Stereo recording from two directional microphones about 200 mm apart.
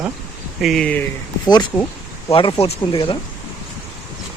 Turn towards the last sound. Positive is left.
turn(degrees=25)  # may be behind; listen again after turning